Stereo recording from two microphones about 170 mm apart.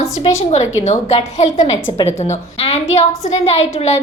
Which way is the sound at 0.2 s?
45° left (ahead or behind).